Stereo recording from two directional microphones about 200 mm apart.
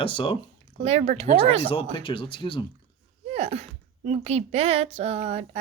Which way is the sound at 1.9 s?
25° left (ahead or behind).